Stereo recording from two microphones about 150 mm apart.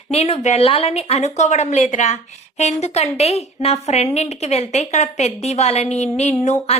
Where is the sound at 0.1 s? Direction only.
45° left (ahead or behind).